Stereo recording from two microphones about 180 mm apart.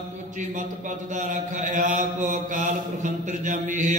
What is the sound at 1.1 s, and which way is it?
Mantra, 45° right (ahead or behind).